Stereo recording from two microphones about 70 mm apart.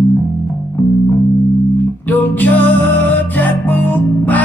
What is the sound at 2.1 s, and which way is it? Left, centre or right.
Music, left.